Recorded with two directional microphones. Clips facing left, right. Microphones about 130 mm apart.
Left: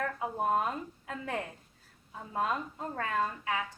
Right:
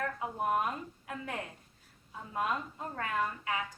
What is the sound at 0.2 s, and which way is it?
A woman's voice, 25° left (ahead or behind).